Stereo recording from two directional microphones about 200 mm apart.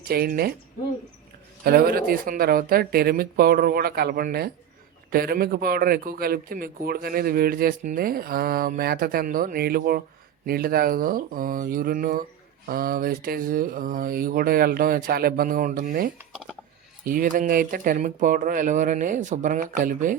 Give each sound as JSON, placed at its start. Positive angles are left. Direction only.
{"t": 0.1, "sound": "a man's voice", "side_deg": -50}
{"t": 1.6, "sound": "a man's voice", "side_deg": -50}
{"t": 16.1, "sound": "speech", "side_deg": -5}
{"t": 17.1, "sound": "speech", "side_deg": -40}